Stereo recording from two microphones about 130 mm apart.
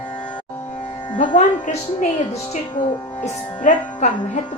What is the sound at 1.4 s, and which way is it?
A woman's voice, 70° left (ahead or behind).